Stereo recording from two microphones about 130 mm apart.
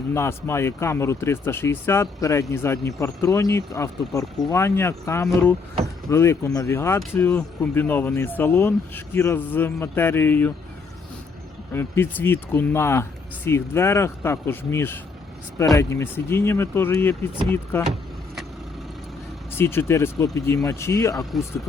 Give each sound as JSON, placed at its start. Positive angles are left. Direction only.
{"t": 0.1, "sound": "a man's voice", "side_deg": 20}
{"t": 11.7, "sound": "a man's voice", "side_deg": 15}
{"t": 19.5, "sound": "speech", "side_deg": 20}